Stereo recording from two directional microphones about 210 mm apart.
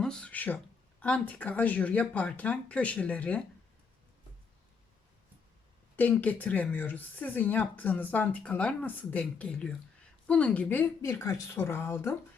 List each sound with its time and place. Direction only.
0.0 s speech: 5° left (ahead or behind)
6.0 s speech: 10° left (ahead or behind)